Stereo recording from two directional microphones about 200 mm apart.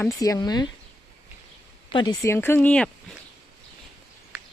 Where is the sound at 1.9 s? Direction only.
20° left (ahead or behind); by 3.1 s 5° left (ahead or behind).